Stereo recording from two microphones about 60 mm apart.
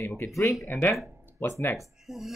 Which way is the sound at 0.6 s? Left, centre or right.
Left.